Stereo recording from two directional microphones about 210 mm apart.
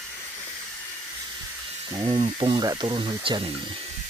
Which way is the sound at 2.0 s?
25° right (ahead or behind).